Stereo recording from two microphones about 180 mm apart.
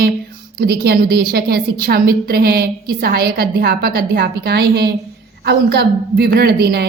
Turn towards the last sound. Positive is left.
turn(degrees=-60)  # may be behind; listen again after turning